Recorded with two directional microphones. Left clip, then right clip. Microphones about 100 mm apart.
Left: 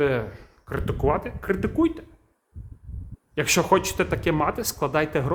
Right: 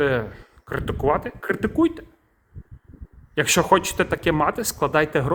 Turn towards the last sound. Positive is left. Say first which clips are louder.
# right 3 dB
turn(degrees=-30)  # may be behind; listen again after turning